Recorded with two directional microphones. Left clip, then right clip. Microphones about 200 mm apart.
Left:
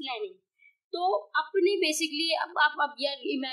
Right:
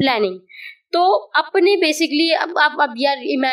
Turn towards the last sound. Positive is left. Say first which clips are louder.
# right 13 dB
turn(degrees=-30)  # may be behind; listen again after turning